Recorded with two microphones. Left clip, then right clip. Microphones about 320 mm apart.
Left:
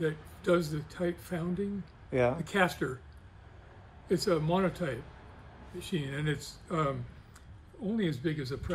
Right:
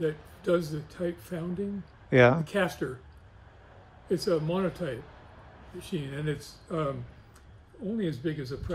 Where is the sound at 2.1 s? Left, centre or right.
Right.